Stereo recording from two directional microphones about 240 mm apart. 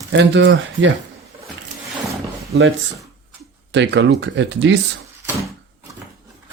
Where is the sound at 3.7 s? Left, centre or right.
Right.